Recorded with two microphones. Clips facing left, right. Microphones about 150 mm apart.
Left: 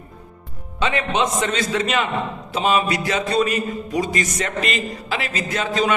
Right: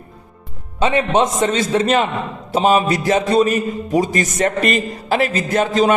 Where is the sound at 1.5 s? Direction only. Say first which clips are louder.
Right 5 dB; 35° right (ahead or behind).